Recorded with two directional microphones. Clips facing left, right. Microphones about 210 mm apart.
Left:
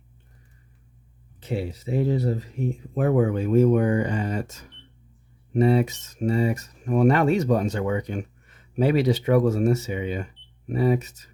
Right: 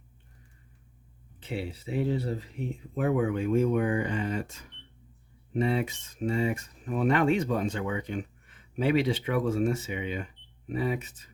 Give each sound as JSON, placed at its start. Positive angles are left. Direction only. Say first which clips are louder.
{"t": 1.5, "sound": "speech", "louder": "left 6 dB", "side_deg": 45}